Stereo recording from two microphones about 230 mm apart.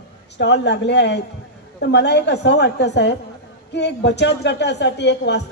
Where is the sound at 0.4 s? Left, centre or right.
Left.